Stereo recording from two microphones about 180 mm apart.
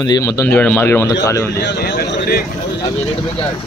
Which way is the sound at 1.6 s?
70° left (ahead or behind).